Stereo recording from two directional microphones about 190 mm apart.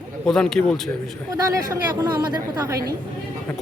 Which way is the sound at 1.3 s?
20° right (ahead or behind).